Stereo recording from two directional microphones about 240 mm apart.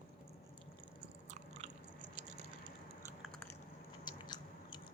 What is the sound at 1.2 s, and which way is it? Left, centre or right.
Biting, right.